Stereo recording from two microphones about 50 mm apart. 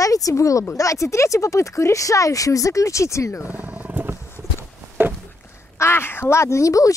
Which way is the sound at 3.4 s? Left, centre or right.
Right.